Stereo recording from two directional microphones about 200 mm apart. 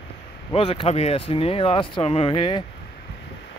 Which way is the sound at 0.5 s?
30° left (ahead or behind).